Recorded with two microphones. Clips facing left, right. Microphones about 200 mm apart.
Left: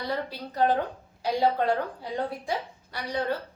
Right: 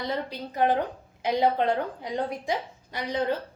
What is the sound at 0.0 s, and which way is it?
A woman's voice, 20° right (ahead or behind).